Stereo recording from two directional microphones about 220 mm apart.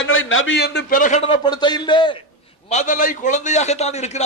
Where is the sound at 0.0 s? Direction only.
65° left (ahead or behind); by 2.2 s 20° left (ahead or behind).